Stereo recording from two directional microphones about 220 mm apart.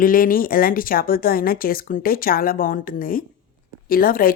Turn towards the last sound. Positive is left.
turn(degrees=40)  # may be behind; listen again after turning